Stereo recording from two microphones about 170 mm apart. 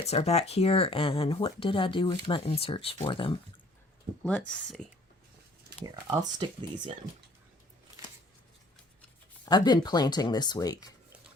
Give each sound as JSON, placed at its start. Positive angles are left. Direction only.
{"t": 0.0, "sound": "speech", "side_deg": 40}
{"t": 4.2, "sound": "speech", "side_deg": 5}
{"t": 5.8, "sound": "speech", "side_deg": -25}
{"t": 9.5, "sound": "speech", "side_deg": 25}